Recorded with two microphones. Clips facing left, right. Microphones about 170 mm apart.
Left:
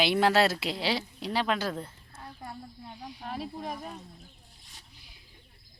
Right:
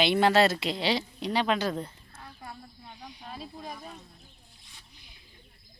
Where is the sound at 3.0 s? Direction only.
5° left (ahead or behind).